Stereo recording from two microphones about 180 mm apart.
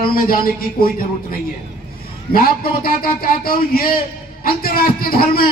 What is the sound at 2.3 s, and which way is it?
Speech, 55° left (ahead or behind).